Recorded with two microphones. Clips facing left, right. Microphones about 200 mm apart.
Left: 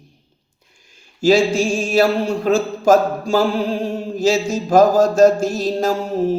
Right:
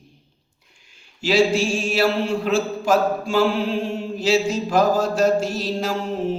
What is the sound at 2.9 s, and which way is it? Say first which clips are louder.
Mantra: left 6 dB; 40° left (ahead or behind).